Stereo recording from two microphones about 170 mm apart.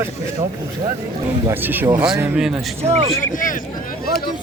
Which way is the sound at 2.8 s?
40° right (ahead or behind).